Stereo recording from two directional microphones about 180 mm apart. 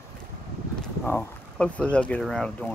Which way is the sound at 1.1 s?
5° left (ahead or behind).